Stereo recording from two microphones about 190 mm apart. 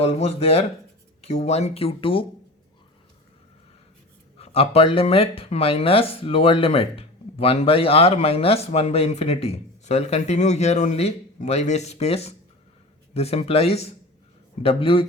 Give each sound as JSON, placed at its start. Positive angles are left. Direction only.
{"t": 0.0, "sound": "speech", "side_deg": 30}
{"t": 4.4, "sound": "speech", "side_deg": 30}